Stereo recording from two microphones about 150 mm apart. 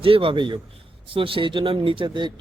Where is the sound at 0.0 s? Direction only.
35° right (ahead or behind).